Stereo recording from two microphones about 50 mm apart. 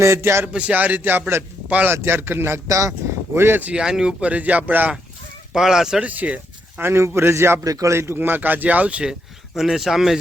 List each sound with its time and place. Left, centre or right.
0.0 s speech: right
0.4 s speech: right
1.9 s speech: right
3.3 s speech: right
3.8 s speech: centre
4.3 s speech: right
5.5 s speech: centre
6.0 s speech: right
6.7 s speech: right
8.4 s speech: right
9.6 s a man's voice: centre